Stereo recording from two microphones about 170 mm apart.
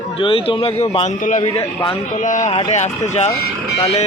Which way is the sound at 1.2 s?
50° left (ahead or behind).